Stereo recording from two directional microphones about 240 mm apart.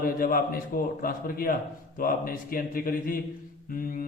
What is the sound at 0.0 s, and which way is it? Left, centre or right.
A man's voice, left.